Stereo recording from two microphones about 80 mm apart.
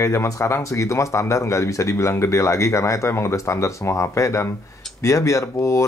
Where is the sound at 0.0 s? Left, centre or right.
Left.